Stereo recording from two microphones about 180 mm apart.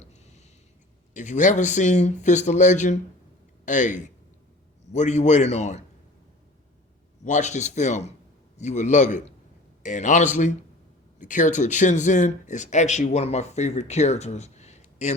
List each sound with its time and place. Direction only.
0.0 s a sound: 40° left (ahead or behind)
1.1 s a man's voice: 45° left (ahead or behind)
7.3 s a man's voice: 40° left (ahead or behind)